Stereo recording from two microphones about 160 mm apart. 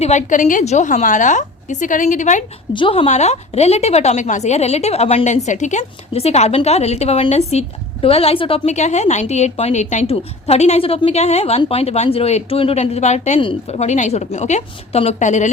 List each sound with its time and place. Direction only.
0.0 s a woman's voice: 45° left (ahead or behind)
2.7 s a woman's voice: 30° left (ahead or behind)
3.1 s a woman's voice: 45° left (ahead or behind)